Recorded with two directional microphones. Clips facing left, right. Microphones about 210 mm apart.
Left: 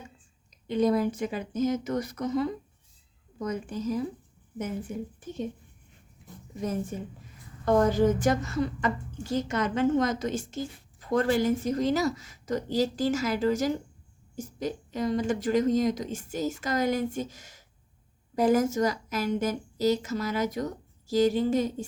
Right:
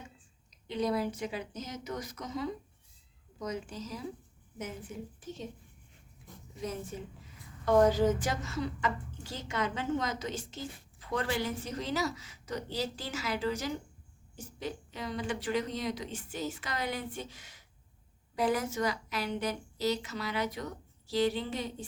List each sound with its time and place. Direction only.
0.7 s a woman's voice: 50° left (ahead or behind)
5.2 s a woman's voice: 55° left (ahead or behind)
6.6 s a woman's voice: 50° left (ahead or behind)